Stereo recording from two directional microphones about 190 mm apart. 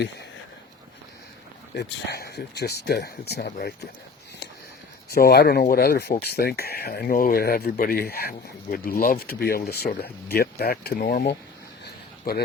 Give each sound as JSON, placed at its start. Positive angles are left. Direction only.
{"t": 1.7, "sound": "speech", "side_deg": 60}
{"t": 5.0, "sound": "speech", "side_deg": 55}